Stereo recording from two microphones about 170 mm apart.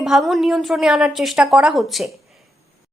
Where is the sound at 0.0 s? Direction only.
Centre (ahead or behind).